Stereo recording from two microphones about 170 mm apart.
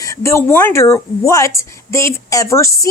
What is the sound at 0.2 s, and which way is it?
A woman's voice, 15° left (ahead or behind).